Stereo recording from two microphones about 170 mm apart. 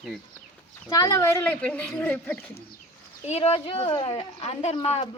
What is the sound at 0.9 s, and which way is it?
Speech, 20° left (ahead or behind).